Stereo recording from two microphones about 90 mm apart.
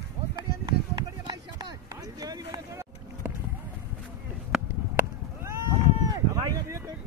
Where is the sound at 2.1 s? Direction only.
45° right (ahead or behind).